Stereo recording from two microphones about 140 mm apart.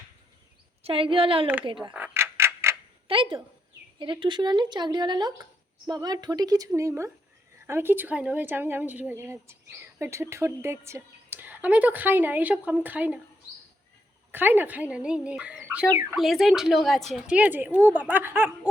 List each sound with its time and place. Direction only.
0.8 s speech: 40° right (ahead or behind)
1.9 s a sound: 15° right (ahead or behind)
3.1 s a woman's voice: 40° right (ahead or behind); by 13.1 s 10° right (ahead or behind)
14.3 s a woman's voice: 15° right (ahead or behind)